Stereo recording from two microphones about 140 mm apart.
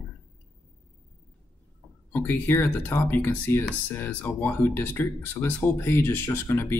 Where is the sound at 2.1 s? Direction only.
15° left (ahead or behind).